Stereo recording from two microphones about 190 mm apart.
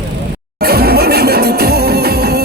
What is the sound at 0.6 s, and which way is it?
Music, 55° right (ahead or behind).